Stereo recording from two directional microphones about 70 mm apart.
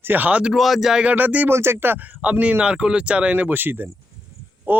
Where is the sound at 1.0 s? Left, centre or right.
Right.